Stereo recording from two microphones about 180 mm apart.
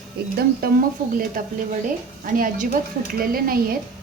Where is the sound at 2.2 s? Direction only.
50° right (ahead or behind).